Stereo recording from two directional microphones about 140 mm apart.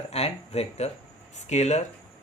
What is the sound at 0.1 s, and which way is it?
Speech, 50° left (ahead or behind).